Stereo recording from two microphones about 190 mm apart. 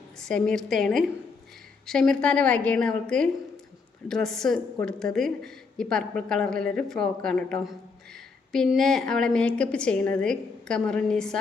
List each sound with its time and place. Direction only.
0.2 s a woman's voice: 5° left (ahead or behind)